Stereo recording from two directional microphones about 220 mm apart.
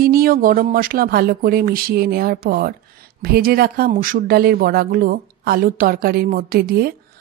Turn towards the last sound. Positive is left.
turn(degrees=-45)  # may be behind; listen again after turning